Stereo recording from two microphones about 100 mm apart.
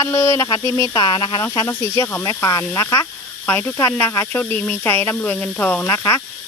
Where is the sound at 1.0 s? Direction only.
50° left (ahead or behind).